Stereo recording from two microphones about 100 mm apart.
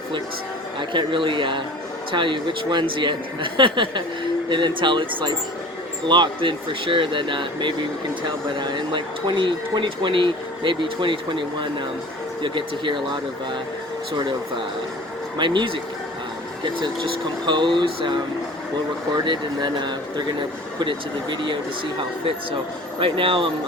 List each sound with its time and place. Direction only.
0.8 s speech: 55° right (ahead or behind)
15.4 s speech: 50° right (ahead or behind)
23.0 s speech: 60° right (ahead or behind)